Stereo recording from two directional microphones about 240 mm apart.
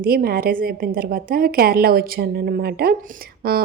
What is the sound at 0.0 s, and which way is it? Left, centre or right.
A woman's voice, right.